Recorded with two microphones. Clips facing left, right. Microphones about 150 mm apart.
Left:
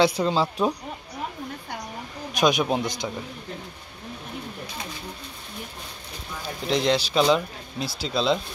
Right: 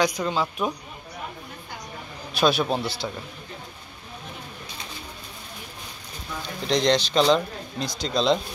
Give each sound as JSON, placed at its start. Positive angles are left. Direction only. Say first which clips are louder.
{"t": 0.0, "sound": "speech", "louder": "left 3 dB", "side_deg": 30}
{"t": 2.3, "sound": "speech", "louder": "even", "side_deg": 15}
{"t": 6.7, "sound": "speech", "louder": "right 1 dB", "side_deg": 5}